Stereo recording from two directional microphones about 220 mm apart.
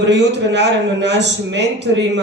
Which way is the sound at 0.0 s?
55° right (ahead or behind).